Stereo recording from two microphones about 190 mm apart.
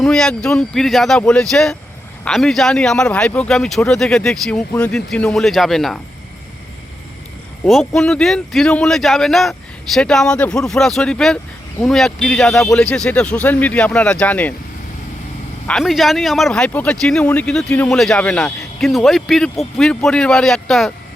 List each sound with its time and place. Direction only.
0.0 s speech: 5° left (ahead or behind)
7.6 s speech: centre (ahead or behind)
15.6 s speech: centre (ahead or behind)